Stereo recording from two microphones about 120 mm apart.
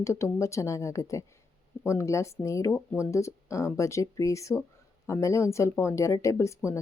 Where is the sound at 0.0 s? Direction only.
25° left (ahead or behind).